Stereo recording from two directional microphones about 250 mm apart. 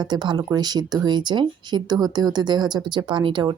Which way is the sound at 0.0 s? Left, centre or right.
Centre.